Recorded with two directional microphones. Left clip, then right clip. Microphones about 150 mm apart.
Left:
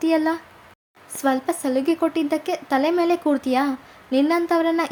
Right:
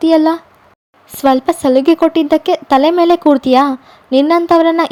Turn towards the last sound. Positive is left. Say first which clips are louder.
# right 10 dB
turn(degrees=-40)  # may be behind; listen again after turning